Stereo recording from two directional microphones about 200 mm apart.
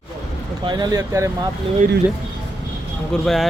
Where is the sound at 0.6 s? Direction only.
20° right (ahead or behind).